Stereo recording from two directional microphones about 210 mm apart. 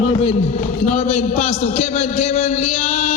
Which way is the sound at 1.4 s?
30° left (ahead or behind).